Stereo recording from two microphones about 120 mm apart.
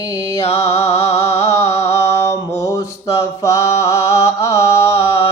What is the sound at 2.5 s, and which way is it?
Mantra, 25° left (ahead or behind).